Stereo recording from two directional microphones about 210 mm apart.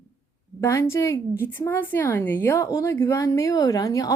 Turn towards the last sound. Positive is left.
turn(degrees=15)  # may be behind; listen again after turning